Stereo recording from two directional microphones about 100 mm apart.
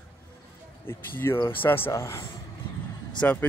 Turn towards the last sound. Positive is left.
turn(degrees=15)  # may be behind; listen again after turning